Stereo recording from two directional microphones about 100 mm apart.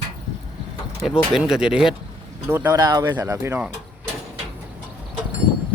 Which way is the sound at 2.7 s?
40° right (ahead or behind).